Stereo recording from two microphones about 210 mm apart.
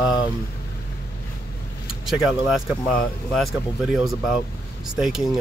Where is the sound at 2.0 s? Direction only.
Centre (ahead or behind).